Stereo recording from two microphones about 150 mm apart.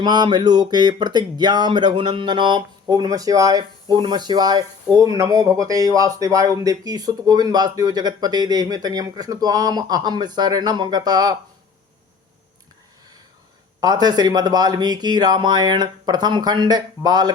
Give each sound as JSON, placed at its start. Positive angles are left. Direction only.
{"t": 0.0, "sound": "speech", "side_deg": -30}
{"t": 13.8, "sound": "speech", "side_deg": -25}